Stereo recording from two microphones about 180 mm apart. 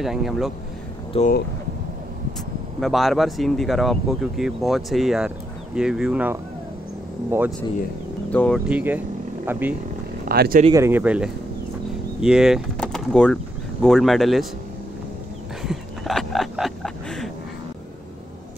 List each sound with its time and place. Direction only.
0.0 s speech: centre (ahead or behind)
1.1 s speech: 35° left (ahead or behind)
2.8 s speech: centre (ahead or behind)
8.3 s speech: 5° left (ahead or behind)
8.6 s speech: 10° right (ahead or behind)
10.2 s speech: 55° right (ahead or behind)
10.7 s speech: 15° right (ahead or behind)
15.6 s a sound: centre (ahead or behind)